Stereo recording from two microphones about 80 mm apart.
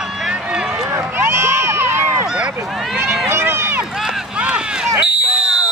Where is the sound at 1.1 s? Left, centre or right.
Right.